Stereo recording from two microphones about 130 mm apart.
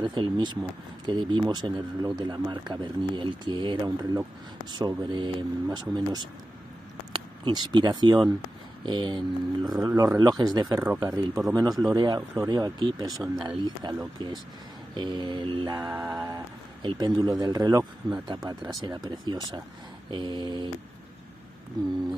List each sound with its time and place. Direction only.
0.0 s speech: 35° right (ahead or behind)
16.8 s speech: 35° right (ahead or behind)